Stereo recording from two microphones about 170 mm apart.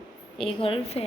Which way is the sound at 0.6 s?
35° left (ahead or behind).